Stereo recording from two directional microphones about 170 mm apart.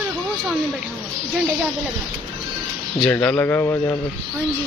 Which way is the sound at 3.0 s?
10° left (ahead or behind).